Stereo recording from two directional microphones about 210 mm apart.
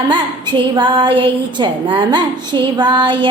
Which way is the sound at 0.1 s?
20° right (ahead or behind).